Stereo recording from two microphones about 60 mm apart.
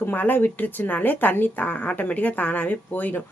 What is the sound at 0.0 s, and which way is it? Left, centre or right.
A woman's voice, left.